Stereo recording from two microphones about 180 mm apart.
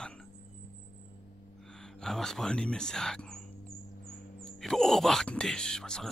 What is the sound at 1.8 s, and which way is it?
Speech, 5° left (ahead or behind).